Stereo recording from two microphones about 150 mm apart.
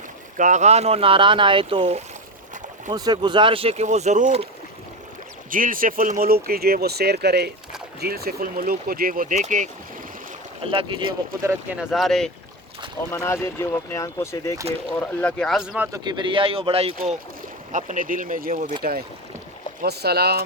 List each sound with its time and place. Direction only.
0.3 s speech: 55° right (ahead or behind)
5.5 s speech: 65° right (ahead or behind)
10.6 s speech: 35° right (ahead or behind)
11.9 s speech: centre (ahead or behind)
13.1 s speech: 15° left (ahead or behind); by 15.9 s 5° right (ahead or behind)
15.9 s speech: 30° right (ahead or behind)
17.7 s speech: 55° right (ahead or behind)
18.8 s speech: 80° right